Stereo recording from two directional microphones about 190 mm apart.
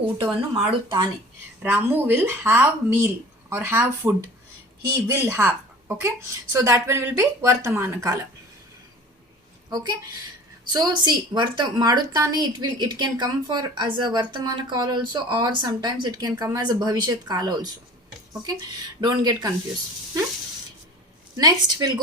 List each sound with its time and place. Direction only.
0.3 s a woman's voice: 25° right (ahead or behind)
1.6 s speech: 10° right (ahead or behind)
9.6 s a woman's voice: 20° right (ahead or behind)
18.9 s a woman's voice: 20° right (ahead or behind)
21.3 s a woman's voice: 20° right (ahead or behind)